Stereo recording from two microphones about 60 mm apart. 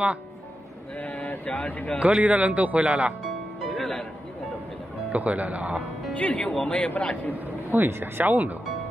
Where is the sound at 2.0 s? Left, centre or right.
Right.